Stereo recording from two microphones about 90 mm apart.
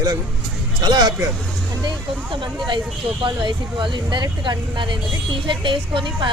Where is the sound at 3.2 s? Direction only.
65° right (ahead or behind).